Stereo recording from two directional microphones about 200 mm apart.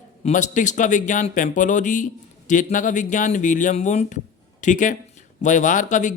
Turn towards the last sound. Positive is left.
turn(degrees=40)  # may be behind; listen again after turning